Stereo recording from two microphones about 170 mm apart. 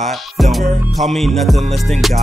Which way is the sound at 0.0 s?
Centre (ahead or behind).